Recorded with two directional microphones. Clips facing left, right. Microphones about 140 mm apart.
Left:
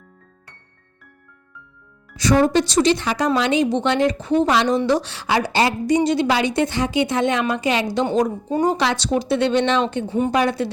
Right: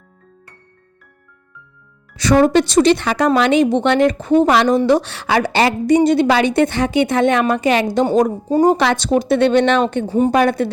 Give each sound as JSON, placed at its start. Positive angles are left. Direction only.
{"t": 2.1, "sound": "a woman's voice", "side_deg": -70}
{"t": 10.1, "sound": "speech", "side_deg": -35}
{"t": 10.3, "sound": "a woman's voice", "side_deg": -55}